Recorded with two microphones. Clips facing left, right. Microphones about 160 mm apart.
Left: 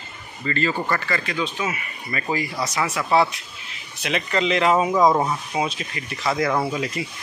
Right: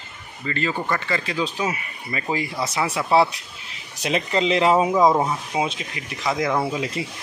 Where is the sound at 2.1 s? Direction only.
20° right (ahead or behind).